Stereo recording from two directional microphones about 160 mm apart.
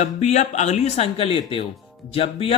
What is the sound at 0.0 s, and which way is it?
Speech, 45° left (ahead or behind).